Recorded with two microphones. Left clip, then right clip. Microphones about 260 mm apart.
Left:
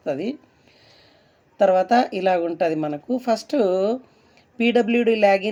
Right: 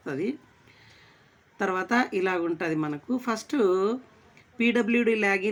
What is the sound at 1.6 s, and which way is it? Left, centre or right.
A woman's voice, centre.